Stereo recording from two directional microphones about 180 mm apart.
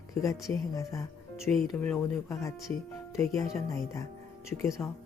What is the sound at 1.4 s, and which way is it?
Speech, 5° left (ahead or behind).